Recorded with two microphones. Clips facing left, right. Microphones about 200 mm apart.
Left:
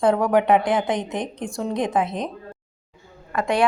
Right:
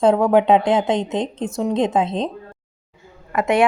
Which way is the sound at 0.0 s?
25° right (ahead or behind).